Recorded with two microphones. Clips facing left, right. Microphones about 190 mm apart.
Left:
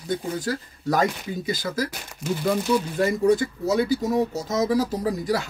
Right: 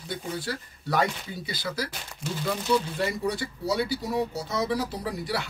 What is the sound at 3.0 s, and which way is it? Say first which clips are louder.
Speech: left 8 dB; 45° left (ahead or behind).